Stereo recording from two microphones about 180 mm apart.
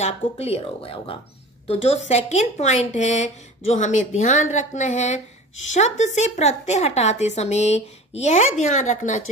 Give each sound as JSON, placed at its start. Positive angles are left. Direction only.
{"t": 0.0, "sound": "speech", "side_deg": 35}